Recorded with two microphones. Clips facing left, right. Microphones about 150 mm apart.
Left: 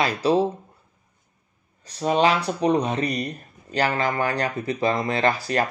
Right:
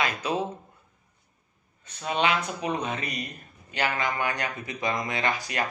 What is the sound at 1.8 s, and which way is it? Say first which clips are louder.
Speech: left 6 dB; 35° left (ahead or behind).